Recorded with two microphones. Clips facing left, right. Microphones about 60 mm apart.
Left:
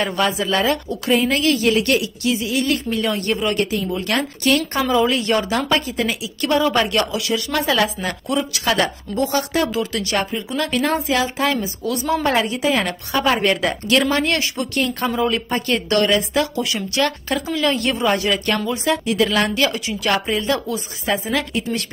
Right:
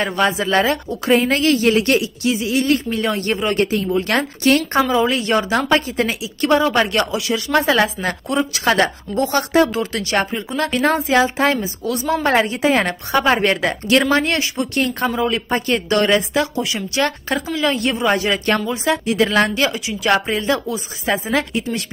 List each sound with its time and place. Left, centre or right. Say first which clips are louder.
0.0 s speech: right 2 dB; right
5.5 s speech: right 3 dB; right
12.3 s speech: right 5 dB; right
17.6 s a woman's voice: even; centre
18.1 s speech: right 2 dB; right
21.5 s a woman's voice: right 1 dB; centre